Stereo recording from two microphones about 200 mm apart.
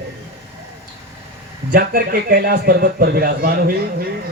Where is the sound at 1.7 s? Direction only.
45° right (ahead or behind).